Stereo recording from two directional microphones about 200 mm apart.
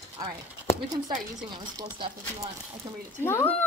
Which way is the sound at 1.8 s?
25° right (ahead or behind).